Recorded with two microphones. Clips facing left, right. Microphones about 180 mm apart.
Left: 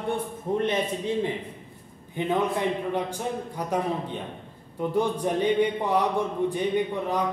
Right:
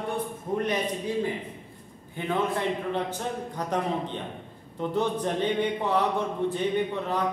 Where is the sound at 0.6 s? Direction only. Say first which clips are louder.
Left 2 dB; 25° left (ahead or behind).